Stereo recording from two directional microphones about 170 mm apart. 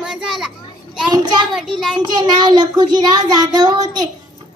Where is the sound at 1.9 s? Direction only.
25° right (ahead or behind).